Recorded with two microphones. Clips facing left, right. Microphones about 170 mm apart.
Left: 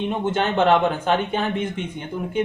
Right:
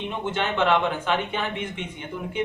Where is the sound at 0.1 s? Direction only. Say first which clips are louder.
Left 2 dB; 40° left (ahead or behind).